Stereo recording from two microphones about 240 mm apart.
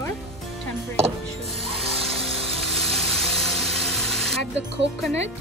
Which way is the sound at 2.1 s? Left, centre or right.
Centre.